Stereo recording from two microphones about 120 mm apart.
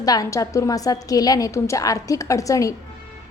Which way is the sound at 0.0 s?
30° left (ahead or behind).